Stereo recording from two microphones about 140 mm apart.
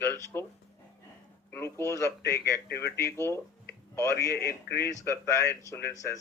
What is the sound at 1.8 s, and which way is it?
Speech, 20° left (ahead or behind).